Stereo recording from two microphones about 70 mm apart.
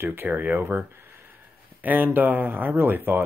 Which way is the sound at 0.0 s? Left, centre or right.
Right.